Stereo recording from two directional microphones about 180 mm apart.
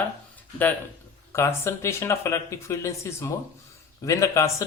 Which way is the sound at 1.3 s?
15° left (ahead or behind).